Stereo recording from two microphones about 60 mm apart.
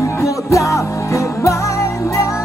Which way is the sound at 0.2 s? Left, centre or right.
Left.